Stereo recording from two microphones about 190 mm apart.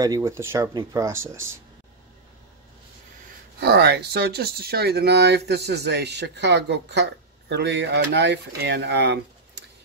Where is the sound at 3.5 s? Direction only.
60° right (ahead or behind).